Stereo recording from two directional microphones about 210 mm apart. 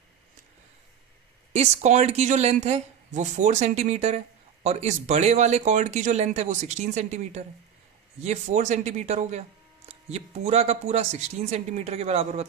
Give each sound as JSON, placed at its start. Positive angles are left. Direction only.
{"t": 1.5, "sound": "speech", "side_deg": -30}